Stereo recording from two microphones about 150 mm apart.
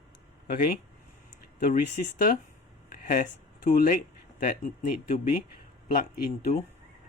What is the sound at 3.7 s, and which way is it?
Speech, 60° left (ahead or behind).